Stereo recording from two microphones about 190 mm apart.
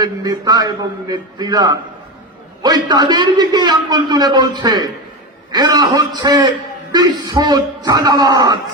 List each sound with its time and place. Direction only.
0.0 s a man's voice: 20° right (ahead or behind)